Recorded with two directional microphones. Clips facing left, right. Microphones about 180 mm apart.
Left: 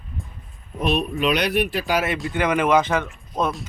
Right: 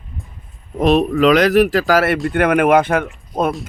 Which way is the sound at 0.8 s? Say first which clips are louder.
Right 9 dB; 90° right.